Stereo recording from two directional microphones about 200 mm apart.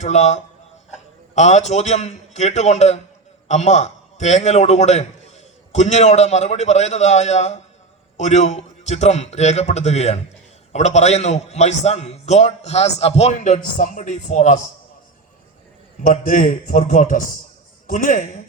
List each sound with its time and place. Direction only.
0.0 s a man's voice: 35° left (ahead or behind)
16.0 s a man's voice: 40° left (ahead or behind)